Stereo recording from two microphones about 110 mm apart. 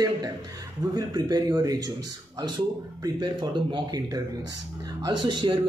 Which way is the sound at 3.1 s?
40° right (ahead or behind).